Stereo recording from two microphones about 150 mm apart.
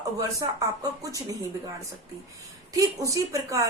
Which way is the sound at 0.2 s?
25° right (ahead or behind).